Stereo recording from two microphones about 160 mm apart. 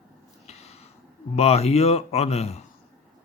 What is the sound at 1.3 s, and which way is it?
Speech, 40° left (ahead or behind).